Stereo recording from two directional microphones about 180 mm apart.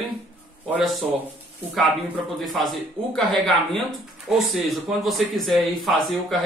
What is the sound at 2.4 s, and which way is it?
Speech, centre (ahead or behind).